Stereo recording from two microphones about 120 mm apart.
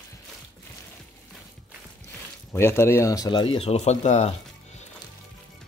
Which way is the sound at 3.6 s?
65° left (ahead or behind).